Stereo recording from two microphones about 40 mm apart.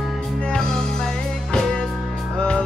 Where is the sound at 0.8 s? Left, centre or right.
Centre.